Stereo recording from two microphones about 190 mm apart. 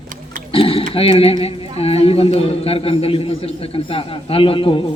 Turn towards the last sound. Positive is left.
turn(degrees=30)  # may be behind; listen again after turning